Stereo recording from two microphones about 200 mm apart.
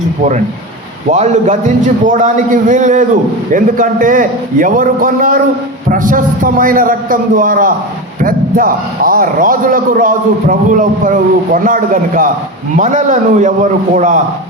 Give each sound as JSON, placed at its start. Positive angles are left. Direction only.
{"t": 1.1, "sound": "a man's voice", "side_deg": -35}